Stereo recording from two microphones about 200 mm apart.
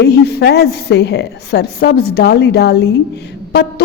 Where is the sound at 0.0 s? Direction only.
55° left (ahead or behind).